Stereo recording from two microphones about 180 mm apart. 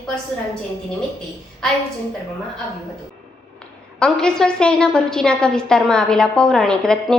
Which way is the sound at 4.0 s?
5° left (ahead or behind).